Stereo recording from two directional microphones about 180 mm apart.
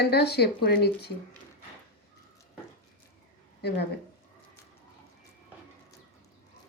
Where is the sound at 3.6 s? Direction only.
65° left (ahead or behind).